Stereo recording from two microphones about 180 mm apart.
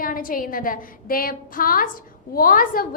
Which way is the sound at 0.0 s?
50° left (ahead or behind).